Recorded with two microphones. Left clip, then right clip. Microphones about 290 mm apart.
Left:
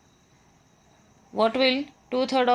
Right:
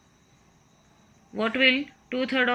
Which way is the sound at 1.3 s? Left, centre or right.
Centre.